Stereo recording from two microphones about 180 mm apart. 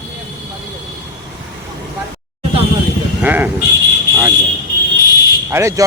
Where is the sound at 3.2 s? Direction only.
10° right (ahead or behind).